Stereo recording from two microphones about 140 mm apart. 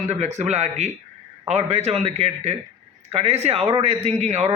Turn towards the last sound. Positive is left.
turn(degrees=-50)  # may be behind; listen again after turning